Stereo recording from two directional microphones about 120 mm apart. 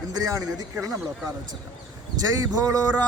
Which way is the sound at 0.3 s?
25° right (ahead or behind).